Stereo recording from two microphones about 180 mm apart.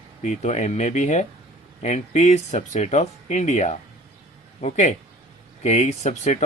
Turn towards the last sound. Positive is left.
turn(degrees=40)  # may be behind; listen again after turning